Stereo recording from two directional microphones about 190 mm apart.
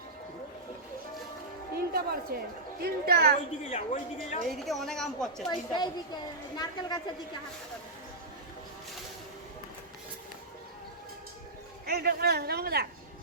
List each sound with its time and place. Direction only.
1.7 s music: 55° right (ahead or behind)
2.8 s speech: 55° right (ahead or behind)
3.7 s a woman's voice: 40° left (ahead or behind)
4.4 s a woman's voice: centre (ahead or behind)
5.5 s a woman's voice: 20° left (ahead or behind)
11.9 s a man's voice: 55° right (ahead or behind)